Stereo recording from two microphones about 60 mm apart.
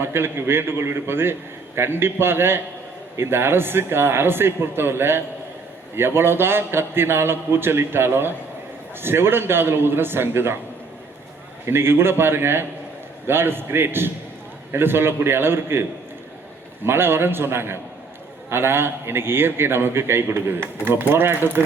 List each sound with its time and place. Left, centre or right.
0.0 s a man's voice: right
11.6 s a man's voice: right